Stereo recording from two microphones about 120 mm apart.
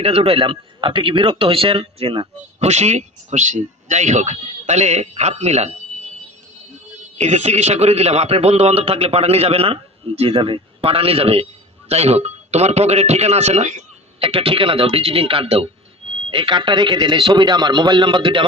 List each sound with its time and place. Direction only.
0.0 s speech: 55° right (ahead or behind)
7.2 s a man's voice: 65° right (ahead or behind); by 18.4 s 45° right (ahead or behind)